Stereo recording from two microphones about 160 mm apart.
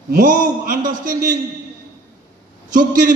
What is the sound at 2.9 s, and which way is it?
Speech, 60° right (ahead or behind).